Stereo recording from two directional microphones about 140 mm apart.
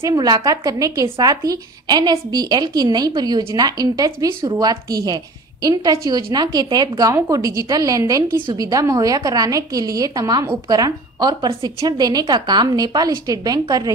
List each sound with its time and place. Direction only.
0.0 s a woman's voice: 25° right (ahead or behind)